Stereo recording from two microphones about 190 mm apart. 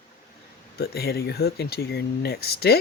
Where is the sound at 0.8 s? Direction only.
55° left (ahead or behind).